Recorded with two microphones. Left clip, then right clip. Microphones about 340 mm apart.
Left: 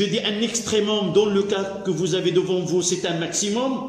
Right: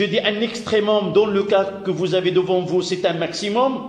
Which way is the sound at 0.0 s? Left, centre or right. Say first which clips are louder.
Right 3 dB; centre.